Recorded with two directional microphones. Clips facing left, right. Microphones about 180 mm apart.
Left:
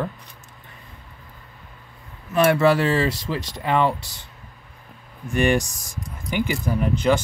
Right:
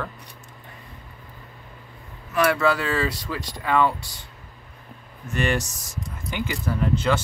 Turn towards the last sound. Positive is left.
turn(degrees=15)  # may be behind; listen again after turning